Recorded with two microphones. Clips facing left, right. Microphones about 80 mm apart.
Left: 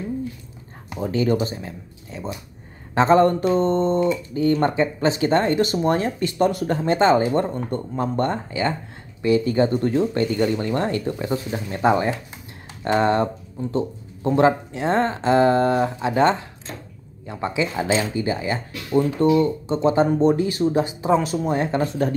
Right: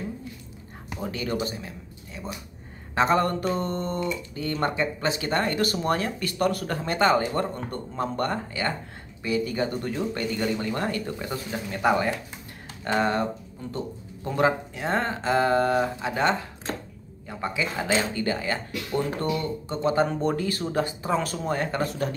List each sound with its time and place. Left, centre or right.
0.9 s speech: left
9.3 s speech: left
11.1 s speech: left
14.2 s speech: left